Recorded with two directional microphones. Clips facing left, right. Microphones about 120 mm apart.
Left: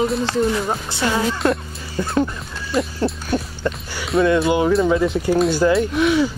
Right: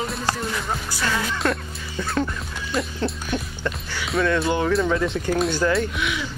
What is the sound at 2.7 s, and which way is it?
Speech, centre (ahead or behind).